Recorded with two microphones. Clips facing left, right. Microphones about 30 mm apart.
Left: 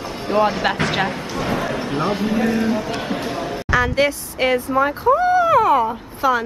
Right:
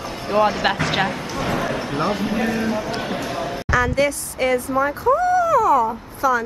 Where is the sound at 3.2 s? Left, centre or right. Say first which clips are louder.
Left 1 dB; centre.